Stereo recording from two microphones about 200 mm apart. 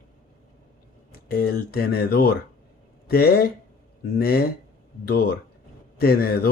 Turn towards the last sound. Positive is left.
turn(degrees=50)  # may be behind; listen again after turning